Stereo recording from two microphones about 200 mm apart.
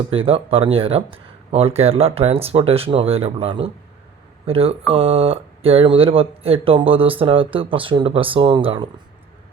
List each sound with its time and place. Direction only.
0.1 s speech: 30° right (ahead or behind)